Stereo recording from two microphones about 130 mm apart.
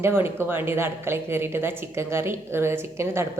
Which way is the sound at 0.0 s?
20° right (ahead or behind).